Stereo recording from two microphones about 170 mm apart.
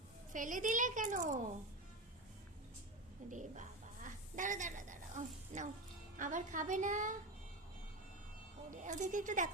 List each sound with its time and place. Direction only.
0.3 s a child's voice: 50° right (ahead or behind)
3.2 s a sound: 45° right (ahead or behind)
6.1 s a child's voice: 50° right (ahead or behind)
8.7 s a child's voice: 45° right (ahead or behind)